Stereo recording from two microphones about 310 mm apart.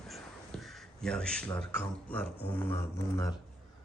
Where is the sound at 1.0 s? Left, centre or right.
Centre.